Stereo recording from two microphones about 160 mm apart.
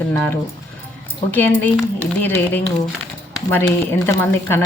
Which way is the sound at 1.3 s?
10° left (ahead or behind).